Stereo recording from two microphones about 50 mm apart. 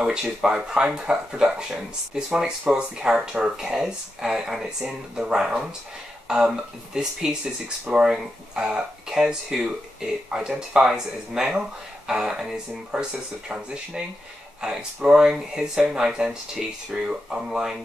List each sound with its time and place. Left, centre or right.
0.0 s speech: centre
14.6 s speech: centre